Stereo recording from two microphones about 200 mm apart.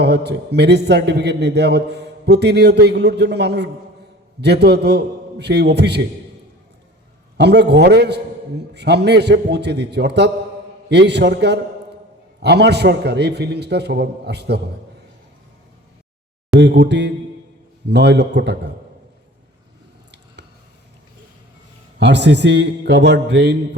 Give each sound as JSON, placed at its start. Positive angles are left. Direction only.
{"t": 0.0, "sound": "a man's voice", "side_deg": -55}
{"t": 7.3, "sound": "a man's voice", "side_deg": -55}
{"t": 16.5, "sound": "a man's voice", "side_deg": -60}
{"t": 21.9, "sound": "a man's voice", "side_deg": -60}